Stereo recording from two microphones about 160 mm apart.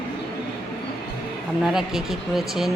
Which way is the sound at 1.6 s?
5° right (ahead or behind).